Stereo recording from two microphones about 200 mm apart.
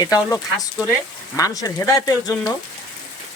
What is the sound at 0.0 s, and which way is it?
Speech, 15° left (ahead or behind).